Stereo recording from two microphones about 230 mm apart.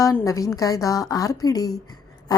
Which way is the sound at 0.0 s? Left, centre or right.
Centre.